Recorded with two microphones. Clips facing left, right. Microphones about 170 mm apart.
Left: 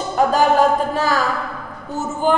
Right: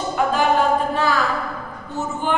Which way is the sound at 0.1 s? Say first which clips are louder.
Left 4 dB; 40° left (ahead or behind).